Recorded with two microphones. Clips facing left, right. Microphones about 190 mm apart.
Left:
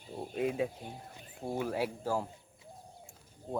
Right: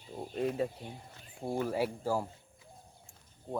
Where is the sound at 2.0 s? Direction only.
10° right (ahead or behind).